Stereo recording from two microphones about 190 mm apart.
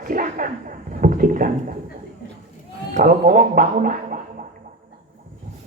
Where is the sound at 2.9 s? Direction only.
45° right (ahead or behind).